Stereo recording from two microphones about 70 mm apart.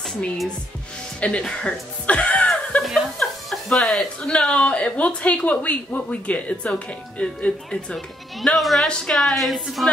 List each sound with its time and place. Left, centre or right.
1.2 s chuckle: centre
2.8 s chuckle: centre
3.7 s a woman's voice: centre
8.4 s a woman's voice: centre